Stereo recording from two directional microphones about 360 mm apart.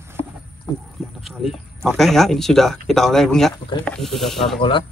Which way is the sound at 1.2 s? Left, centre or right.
Centre.